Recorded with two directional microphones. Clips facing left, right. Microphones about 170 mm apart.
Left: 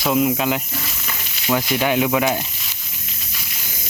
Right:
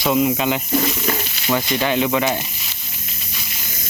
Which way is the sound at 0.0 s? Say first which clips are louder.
Right 1 dB; centre (ahead or behind).